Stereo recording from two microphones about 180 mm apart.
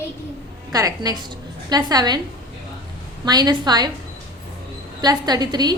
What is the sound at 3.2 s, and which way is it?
Speech, 20° right (ahead or behind).